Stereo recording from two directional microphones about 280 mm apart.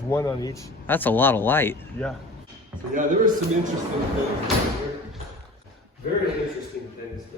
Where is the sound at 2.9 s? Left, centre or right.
Right.